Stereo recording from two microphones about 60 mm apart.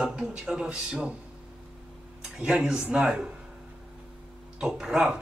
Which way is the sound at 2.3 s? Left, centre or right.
Centre.